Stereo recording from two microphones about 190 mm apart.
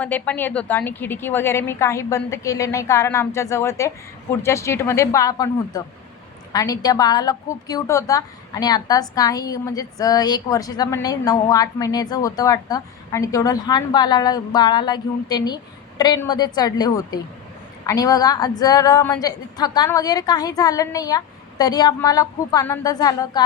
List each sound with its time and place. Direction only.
0.0 s a woman's voice: 10° left (ahead or behind)